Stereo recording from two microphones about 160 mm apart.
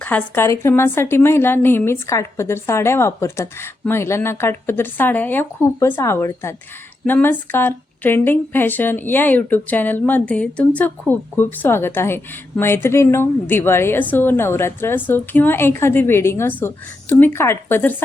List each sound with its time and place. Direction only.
0.0 s a woman's voice: 15° left (ahead or behind)